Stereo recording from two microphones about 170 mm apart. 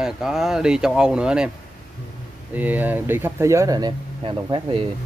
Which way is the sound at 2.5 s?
10° right (ahead or behind).